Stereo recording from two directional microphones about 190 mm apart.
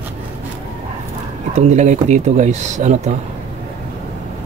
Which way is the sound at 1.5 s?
40° right (ahead or behind).